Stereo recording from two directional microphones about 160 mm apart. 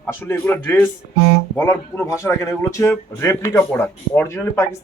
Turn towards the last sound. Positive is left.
turn(degrees=15)  # may be behind; listen again after turning